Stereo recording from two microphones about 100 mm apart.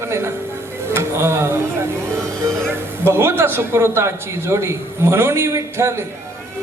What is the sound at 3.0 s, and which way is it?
A man's voice, 25° right (ahead or behind).